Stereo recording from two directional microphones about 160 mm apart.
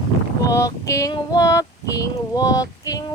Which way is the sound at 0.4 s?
20° left (ahead or behind).